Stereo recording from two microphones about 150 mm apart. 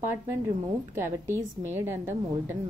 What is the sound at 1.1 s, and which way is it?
A woman's voice, 15° right (ahead or behind).